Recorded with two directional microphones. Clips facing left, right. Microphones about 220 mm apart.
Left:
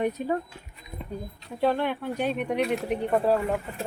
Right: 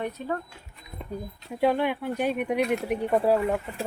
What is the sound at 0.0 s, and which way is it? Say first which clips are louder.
Speech: left 4 dB; 15° left (ahead or behind).